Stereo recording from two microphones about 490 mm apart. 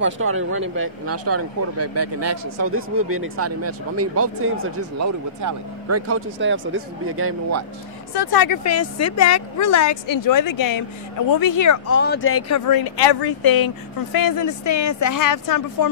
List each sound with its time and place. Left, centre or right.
0.0 s speech: right
8.1 s speech: left
8.6 s a woman's voice: left
11.9 s a woman's voice: left